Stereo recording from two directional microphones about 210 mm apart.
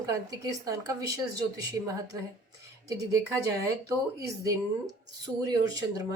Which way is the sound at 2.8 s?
15° right (ahead or behind).